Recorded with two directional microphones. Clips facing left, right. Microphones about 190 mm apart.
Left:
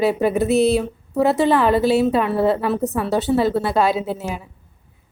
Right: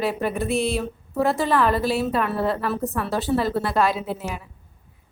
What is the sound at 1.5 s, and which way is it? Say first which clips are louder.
A woman's voice: left 5 dB; 25° left (ahead or behind).